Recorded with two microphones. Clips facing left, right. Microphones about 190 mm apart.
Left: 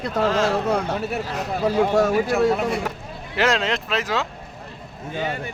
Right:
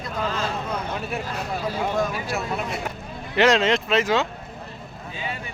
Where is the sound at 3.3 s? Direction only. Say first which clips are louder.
Right 3 dB; centre (ahead or behind).